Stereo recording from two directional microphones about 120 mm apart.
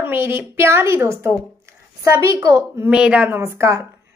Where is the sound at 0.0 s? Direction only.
20° right (ahead or behind).